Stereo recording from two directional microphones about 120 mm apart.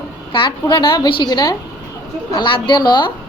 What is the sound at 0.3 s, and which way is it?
A woman's voice, 40° left (ahead or behind).